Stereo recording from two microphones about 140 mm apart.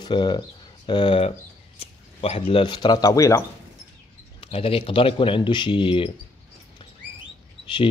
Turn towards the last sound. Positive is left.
turn(degrees=35)  # may be behind; listen again after turning